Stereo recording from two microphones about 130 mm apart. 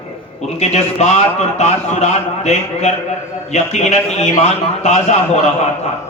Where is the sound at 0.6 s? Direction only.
60° left (ahead or behind).